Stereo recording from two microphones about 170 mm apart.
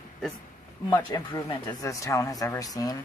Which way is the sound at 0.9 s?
20° left (ahead or behind).